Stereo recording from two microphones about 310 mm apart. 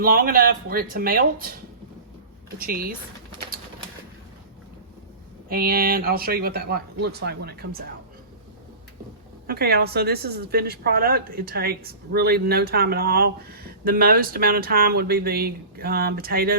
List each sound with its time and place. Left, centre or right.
0.0 s speech: right
2.6 s speech: right
5.5 s speech: right
9.5 s speech: right